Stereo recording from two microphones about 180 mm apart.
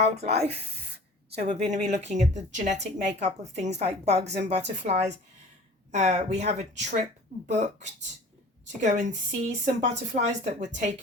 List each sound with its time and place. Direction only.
0.2 s speech: 35° right (ahead or behind)